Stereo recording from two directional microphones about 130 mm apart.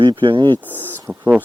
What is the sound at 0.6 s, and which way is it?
Speech, 15° right (ahead or behind).